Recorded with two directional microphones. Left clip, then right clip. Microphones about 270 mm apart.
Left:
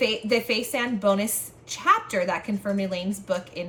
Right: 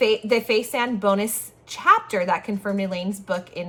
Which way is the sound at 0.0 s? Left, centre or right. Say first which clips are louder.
Right 4 dB; right.